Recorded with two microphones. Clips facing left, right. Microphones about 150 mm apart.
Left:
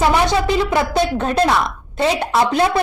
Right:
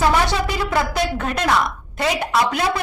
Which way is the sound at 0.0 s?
25° left (ahead or behind).